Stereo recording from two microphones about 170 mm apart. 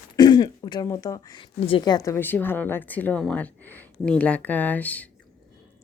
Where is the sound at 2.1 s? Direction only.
10° left (ahead or behind).